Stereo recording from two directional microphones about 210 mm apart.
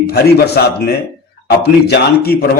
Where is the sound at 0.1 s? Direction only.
50° left (ahead or behind).